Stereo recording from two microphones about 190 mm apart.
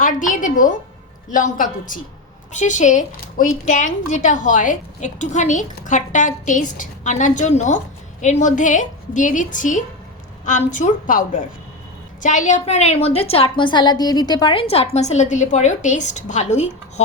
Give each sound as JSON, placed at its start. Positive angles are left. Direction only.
{"t": 0.0, "sound": "a woman's voice", "side_deg": 45}
{"t": 12.2, "sound": "a woman's voice", "side_deg": 40}